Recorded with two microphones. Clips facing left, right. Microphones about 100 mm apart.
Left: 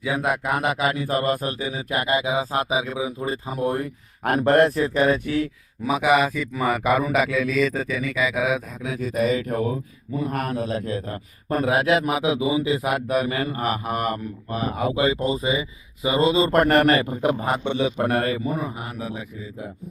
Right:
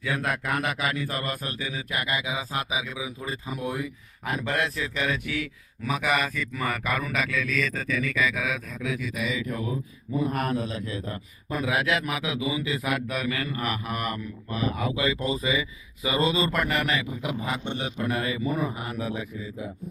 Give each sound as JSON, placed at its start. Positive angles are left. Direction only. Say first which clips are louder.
{"t": 0.0, "sound": "a man's voice", "louder": "left 5 dB", "side_deg": 15}
{"t": 4.2, "sound": "a man's voice", "louder": "left 11 dB", "side_deg": 60}
{"t": 5.8, "sound": "a man's voice", "louder": "left 7 dB", "side_deg": 15}
{"t": 8.9, "sound": "a man's voice", "louder": "left 8 dB", "side_deg": 40}
{"t": 16.5, "sound": "a man's voice", "louder": "left 9 dB", "side_deg": 50}
{"t": 17.6, "sound": "a man's voice", "louder": "left 8 dB", "side_deg": 60}